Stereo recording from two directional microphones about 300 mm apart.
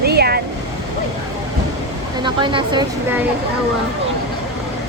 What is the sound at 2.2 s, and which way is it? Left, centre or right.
Speech, centre.